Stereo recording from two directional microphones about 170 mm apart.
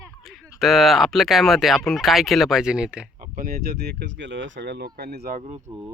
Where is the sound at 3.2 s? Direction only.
60° right (ahead or behind).